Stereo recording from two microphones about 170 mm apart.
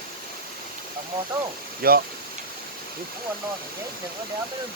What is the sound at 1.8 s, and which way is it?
Speech, 65° right (ahead or behind).